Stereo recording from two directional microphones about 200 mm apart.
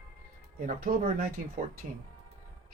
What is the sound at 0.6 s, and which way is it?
Speech, 45° right (ahead or behind).